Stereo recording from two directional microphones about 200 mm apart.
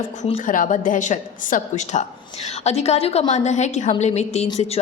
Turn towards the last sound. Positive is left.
turn(degrees=30)  # may be behind; listen again after turning